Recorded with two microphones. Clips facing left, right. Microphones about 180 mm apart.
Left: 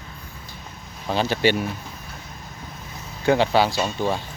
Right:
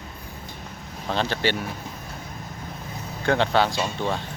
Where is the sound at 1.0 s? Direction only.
10° left (ahead or behind).